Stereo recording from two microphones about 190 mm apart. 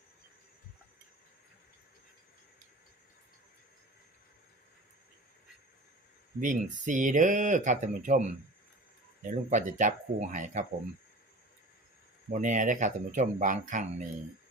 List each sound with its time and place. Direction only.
6.4 s speech: 40° right (ahead or behind)
12.3 s speech: 40° right (ahead or behind)